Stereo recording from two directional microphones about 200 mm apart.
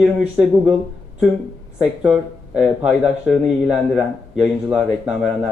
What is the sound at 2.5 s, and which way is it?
Speech, 5° right (ahead or behind).